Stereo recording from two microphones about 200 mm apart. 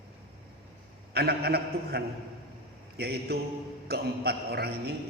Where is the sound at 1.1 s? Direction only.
50° right (ahead or behind).